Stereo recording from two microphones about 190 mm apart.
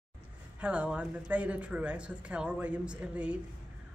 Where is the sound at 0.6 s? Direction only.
5° right (ahead or behind).